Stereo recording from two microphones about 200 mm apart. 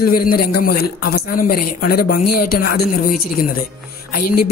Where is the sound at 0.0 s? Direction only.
45° left (ahead or behind).